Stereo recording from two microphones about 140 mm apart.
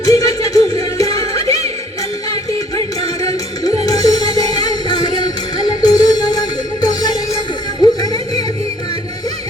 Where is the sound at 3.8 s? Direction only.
25° left (ahead or behind).